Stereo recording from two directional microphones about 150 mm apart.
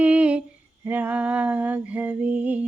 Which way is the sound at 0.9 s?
10° right (ahead or behind).